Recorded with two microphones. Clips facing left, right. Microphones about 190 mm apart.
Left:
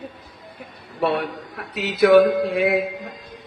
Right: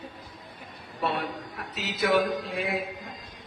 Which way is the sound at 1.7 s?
65° left (ahead or behind).